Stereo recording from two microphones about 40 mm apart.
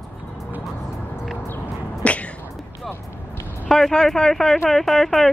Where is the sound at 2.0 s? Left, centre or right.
Left.